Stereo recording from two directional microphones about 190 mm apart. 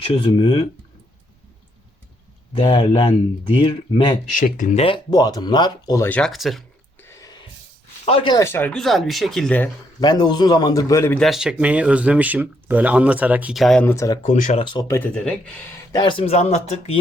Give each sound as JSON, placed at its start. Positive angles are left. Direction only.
{"t": 0.0, "sound": "speech", "side_deg": 30}
{"t": 2.6, "sound": "speech", "side_deg": 30}
{"t": 4.3, "sound": "speech", "side_deg": 45}
{"t": 4.8, "sound": "speech", "side_deg": 25}
{"t": 7.0, "sound": "a sound", "side_deg": 15}
{"t": 8.0, "sound": "speech", "side_deg": 30}
{"t": 10.0, "sound": "speech", "side_deg": 20}
{"t": 11.2, "sound": "speech", "side_deg": 0}
{"t": 13.9, "sound": "speech", "side_deg": 15}
{"t": 14.2, "sound": "speech", "side_deg": 40}
{"t": 14.6, "sound": "speech", "side_deg": 25}
{"t": 15.9, "sound": "speech", "side_deg": 25}